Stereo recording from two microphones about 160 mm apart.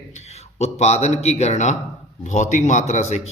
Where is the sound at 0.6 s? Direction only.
45° left (ahead or behind).